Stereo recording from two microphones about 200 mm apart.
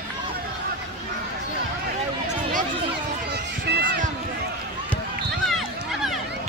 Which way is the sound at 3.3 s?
55° right (ahead or behind).